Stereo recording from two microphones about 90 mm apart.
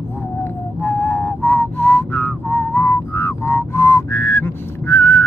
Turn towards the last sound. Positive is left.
turn(degrees=25)  # may be behind; listen again after turning